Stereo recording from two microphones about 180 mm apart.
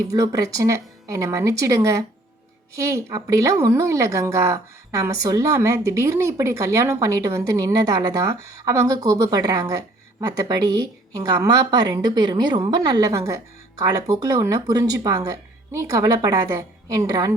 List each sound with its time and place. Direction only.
0.1 s a woman's voice: 20° right (ahead or behind)